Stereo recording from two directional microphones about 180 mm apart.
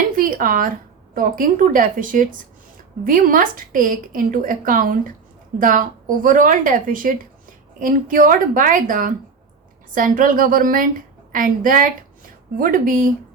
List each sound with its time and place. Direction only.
0.2 s a woman's voice: 50° right (ahead or behind)